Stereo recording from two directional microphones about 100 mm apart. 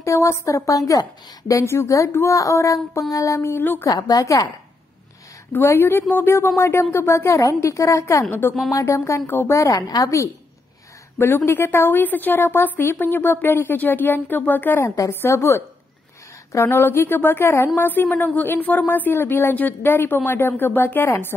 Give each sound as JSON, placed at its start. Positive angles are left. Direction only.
{"t": 0.0, "sound": "speech", "side_deg": 30}
{"t": 3.9, "sound": "speech", "side_deg": 40}
{"t": 5.5, "sound": "a woman's voice", "side_deg": 25}
{"t": 15.0, "sound": "a woman's voice", "side_deg": 30}